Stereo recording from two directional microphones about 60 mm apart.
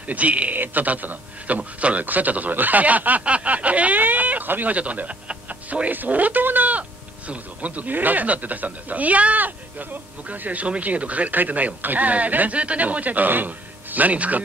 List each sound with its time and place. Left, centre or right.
0.0 s a man's voice: right